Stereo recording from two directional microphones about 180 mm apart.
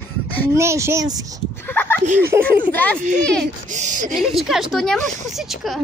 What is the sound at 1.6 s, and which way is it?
Speech, 10° left (ahead or behind).